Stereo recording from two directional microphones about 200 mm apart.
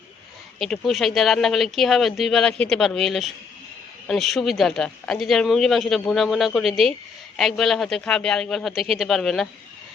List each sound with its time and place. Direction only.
0.6 s speech: centre (ahead or behind)